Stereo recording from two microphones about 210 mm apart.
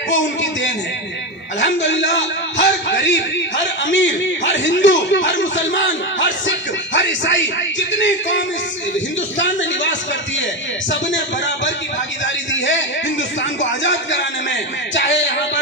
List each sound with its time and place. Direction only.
0.1 s a man's voice: 60° left (ahead or behind)